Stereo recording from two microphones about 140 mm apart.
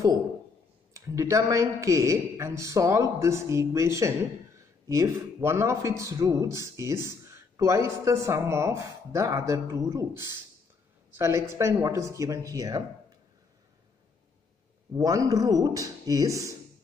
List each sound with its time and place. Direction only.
0.9 s a man's voice: 20° right (ahead or behind)
14.9 s a man's voice: 25° right (ahead or behind)